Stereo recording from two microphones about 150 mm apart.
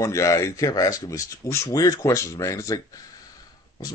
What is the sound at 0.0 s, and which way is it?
Speech, 20° left (ahead or behind).